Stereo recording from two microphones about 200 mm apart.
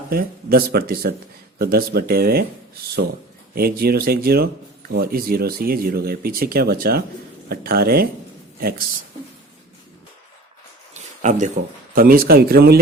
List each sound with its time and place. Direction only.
0.1 s speech: 50° right (ahead or behind)
3.5 s speech: 50° right (ahead or behind)
10.9 s a sound: 35° right (ahead or behind)
11.9 s speech: 50° right (ahead or behind)